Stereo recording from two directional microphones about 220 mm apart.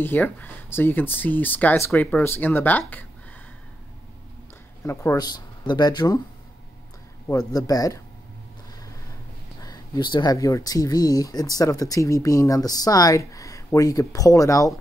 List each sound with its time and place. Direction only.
0.0 s speech: 10° left (ahead or behind)
4.8 s speech: 15° left (ahead or behind)
7.2 s speech: 15° left (ahead or behind)
9.6 s speech: 20° left (ahead or behind)